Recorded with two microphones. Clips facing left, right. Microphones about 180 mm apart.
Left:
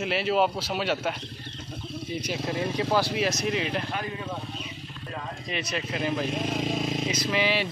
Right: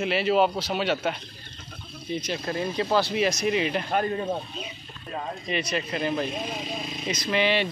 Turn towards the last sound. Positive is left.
turn(degrees=5)  # may be behind; listen again after turning